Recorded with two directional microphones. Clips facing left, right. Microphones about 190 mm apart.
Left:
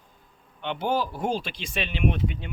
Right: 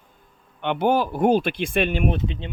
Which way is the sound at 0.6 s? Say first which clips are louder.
Right 6 dB; 60° right (ahead or behind).